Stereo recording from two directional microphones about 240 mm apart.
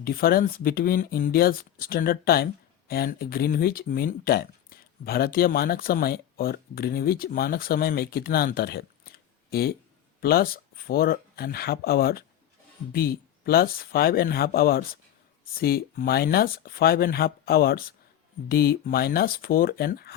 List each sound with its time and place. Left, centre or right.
0.0 s speech: left